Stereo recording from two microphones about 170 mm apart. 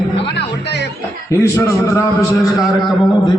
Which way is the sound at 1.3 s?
15° left (ahead or behind).